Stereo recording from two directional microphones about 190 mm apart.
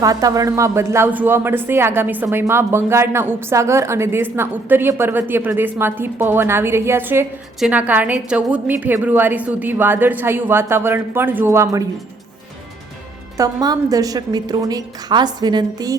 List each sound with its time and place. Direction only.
0.0 s speech: 20° right (ahead or behind)
13.3 s a woman's voice: 20° right (ahead or behind)